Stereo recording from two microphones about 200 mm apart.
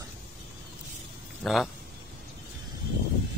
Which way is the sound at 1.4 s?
Centre (ahead or behind).